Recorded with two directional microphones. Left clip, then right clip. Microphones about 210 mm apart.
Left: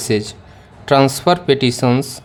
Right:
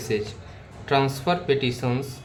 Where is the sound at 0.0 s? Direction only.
50° left (ahead or behind).